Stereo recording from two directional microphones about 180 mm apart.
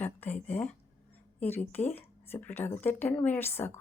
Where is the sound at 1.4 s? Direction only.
10° left (ahead or behind).